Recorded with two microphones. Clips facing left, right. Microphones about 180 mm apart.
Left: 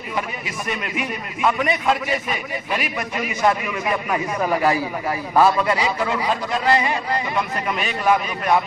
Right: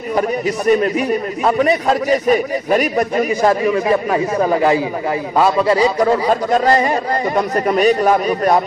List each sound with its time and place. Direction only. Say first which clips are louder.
0.7 s a man's voice: right 13 dB; 40° right (ahead or behind)